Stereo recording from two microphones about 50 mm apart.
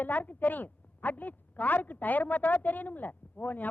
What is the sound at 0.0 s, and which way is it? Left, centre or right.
A woman's voice, left.